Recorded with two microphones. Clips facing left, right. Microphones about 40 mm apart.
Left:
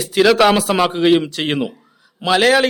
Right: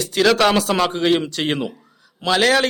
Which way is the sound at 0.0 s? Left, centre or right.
Centre.